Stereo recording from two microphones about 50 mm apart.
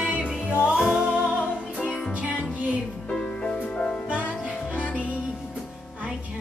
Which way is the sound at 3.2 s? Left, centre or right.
Left.